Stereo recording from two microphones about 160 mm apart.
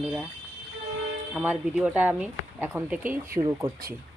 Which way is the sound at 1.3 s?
10° right (ahead or behind).